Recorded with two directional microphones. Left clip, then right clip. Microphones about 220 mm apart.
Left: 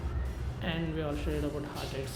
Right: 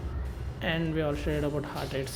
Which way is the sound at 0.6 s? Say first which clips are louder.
Right 6 dB; 30° right (ahead or behind).